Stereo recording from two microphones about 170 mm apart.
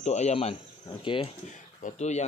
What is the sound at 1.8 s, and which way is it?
Speech, 40° left (ahead or behind).